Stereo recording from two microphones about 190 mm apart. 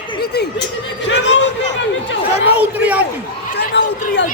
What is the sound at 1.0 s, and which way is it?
Speech, 70° left (ahead or behind).